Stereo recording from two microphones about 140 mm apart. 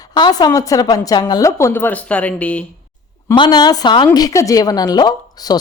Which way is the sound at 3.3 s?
30° left (ahead or behind).